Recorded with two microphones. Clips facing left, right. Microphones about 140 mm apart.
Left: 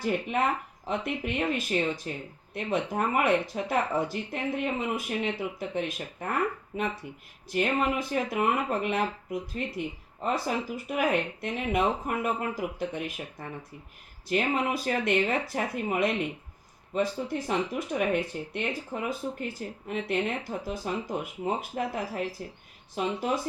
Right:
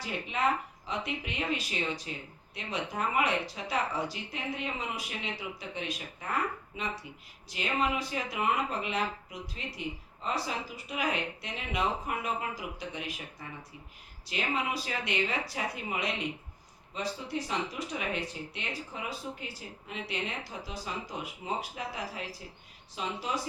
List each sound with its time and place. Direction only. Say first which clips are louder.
0.0 s speech: left 4 dB; 50° left (ahead or behind)